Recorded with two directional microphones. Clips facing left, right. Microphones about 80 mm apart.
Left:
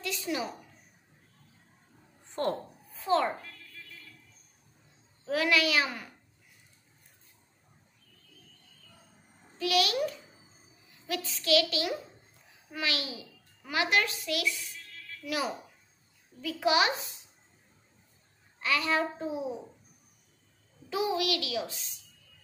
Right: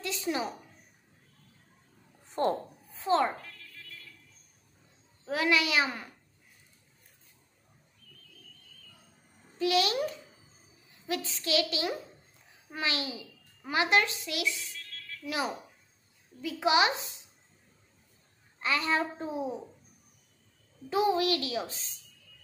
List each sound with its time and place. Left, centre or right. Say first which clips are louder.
0.0 s a sound: right 1 dB; right
2.4 s speech: right 3 dB; centre
3.0 s speech: right 1 dB; right
5.2 s a woman's voice: left 1 dB; right
9.6 s a woman's voice: right 1 dB; right
11.1 s a woman's voice: left 3 dB; right
18.6 s a woman's voice: even; right
20.9 s a woman's voice: right 3 dB; right